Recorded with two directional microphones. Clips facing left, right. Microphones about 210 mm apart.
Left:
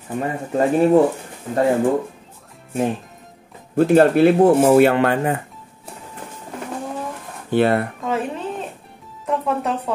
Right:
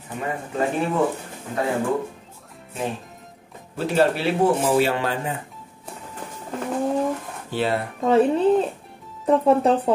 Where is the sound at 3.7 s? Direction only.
50° left (ahead or behind).